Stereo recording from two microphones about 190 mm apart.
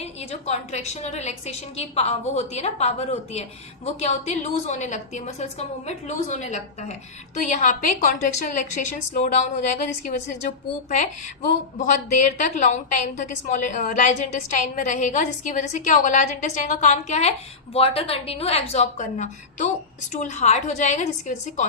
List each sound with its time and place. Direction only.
0.0 s a woman's voice: 35° left (ahead or behind)